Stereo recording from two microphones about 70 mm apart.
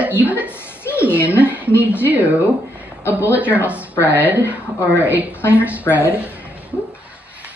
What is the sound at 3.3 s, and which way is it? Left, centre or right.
Speech, right.